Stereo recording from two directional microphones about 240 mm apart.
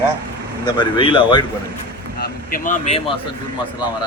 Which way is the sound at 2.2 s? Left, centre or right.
Left.